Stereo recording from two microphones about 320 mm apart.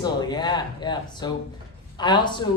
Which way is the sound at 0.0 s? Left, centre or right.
Centre.